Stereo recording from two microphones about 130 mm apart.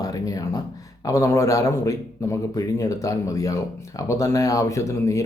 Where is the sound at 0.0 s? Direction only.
25° left (ahead or behind).